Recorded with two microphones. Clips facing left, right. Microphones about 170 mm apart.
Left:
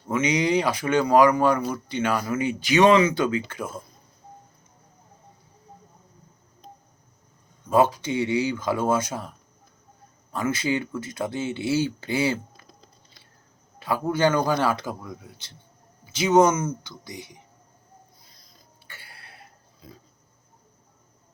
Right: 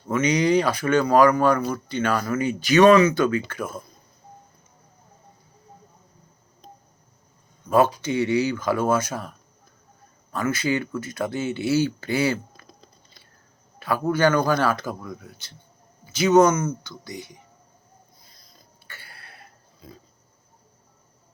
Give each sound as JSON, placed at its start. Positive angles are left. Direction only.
{"t": 0.1, "sound": "speech", "side_deg": 20}
{"t": 7.7, "sound": "speech", "side_deg": 20}
{"t": 10.3, "sound": "speech", "side_deg": 20}
{"t": 13.7, "sound": "a sound", "side_deg": 20}
{"t": 14.1, "sound": "speech", "side_deg": 20}
{"t": 18.9, "sound": "a sound", "side_deg": 20}